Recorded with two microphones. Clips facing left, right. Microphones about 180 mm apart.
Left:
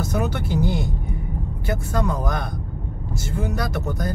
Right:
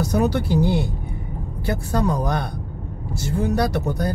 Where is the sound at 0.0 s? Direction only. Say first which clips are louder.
Right 4 dB; 35° right (ahead or behind).